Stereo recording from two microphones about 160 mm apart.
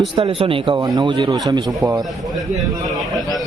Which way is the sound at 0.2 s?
35° right (ahead or behind).